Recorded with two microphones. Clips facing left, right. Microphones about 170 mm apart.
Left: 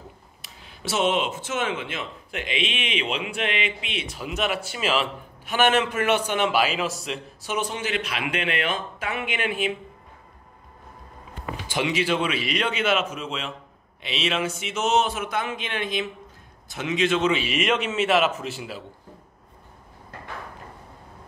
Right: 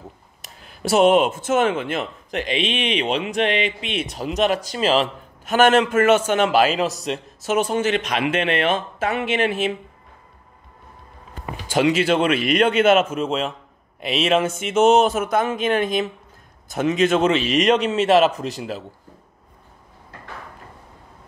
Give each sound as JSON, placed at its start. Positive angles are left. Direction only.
{"t": 0.4, "sound": "speech", "side_deg": -50}
{"t": 2.3, "sound": "a man's voice", "side_deg": -35}
{"t": 7.5, "sound": "a man's voice", "side_deg": -50}
{"t": 11.6, "sound": "a man's voice", "side_deg": -45}